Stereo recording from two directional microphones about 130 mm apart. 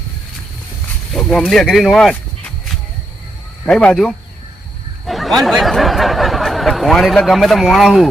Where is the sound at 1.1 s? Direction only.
5° left (ahead or behind).